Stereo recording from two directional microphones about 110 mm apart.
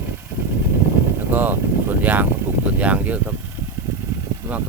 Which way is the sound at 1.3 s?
15° right (ahead or behind).